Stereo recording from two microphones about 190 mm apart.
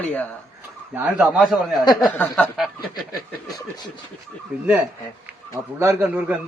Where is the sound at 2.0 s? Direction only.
5° left (ahead or behind).